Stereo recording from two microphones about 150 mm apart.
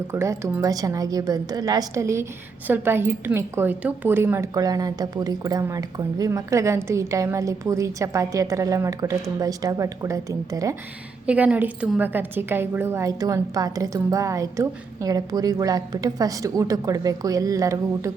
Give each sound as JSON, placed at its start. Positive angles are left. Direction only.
{"t": 0.1, "sound": "a woman's voice", "side_deg": -20}
{"t": 11.3, "sound": "a woman's voice", "side_deg": -10}